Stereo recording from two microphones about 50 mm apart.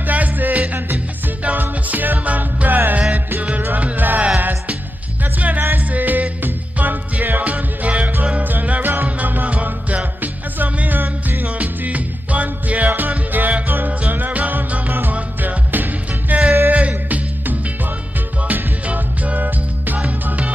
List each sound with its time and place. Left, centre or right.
0.0 s music: right